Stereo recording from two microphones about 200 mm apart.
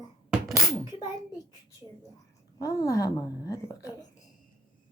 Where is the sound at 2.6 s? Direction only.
15° left (ahead or behind).